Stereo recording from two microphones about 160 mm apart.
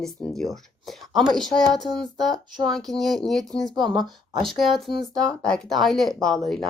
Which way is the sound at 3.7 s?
25° right (ahead or behind).